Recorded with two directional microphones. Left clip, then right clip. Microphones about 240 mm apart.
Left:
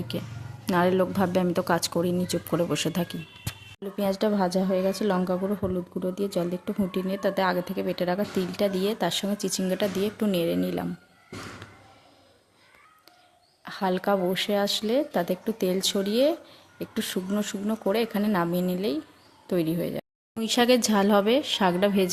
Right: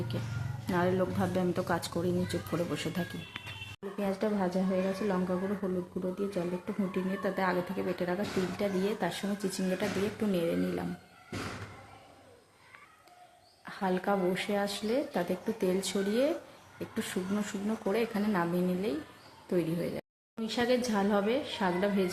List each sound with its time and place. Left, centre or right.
0.7 s a woman's voice: left
6.9 s speech: left
13.7 s a woman's voice: left